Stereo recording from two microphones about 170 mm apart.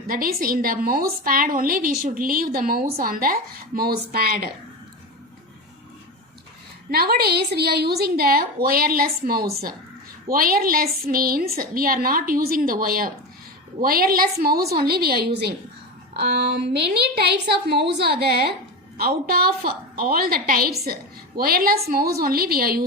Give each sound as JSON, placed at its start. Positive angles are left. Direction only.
{"t": 0.1, "sound": "a woman's voice", "side_deg": -60}
{"t": 6.9, "sound": "a woman's voice", "side_deg": -65}
{"t": 16.1, "sound": "a woman's voice", "side_deg": -80}